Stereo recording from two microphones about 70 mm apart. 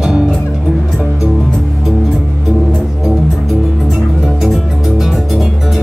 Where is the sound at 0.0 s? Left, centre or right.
Centre.